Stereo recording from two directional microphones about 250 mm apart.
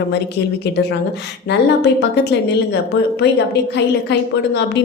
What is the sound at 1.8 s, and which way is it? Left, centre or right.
A woman's voice, left.